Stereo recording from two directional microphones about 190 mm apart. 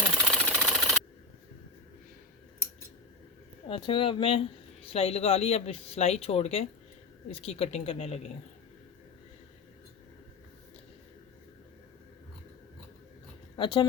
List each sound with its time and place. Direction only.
0.3 s engine: 5° left (ahead or behind)
3.7 s speech: 25° left (ahead or behind)
13.6 s speech: 25° left (ahead or behind)